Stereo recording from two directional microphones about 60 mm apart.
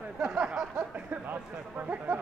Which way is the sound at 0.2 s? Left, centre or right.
Centre.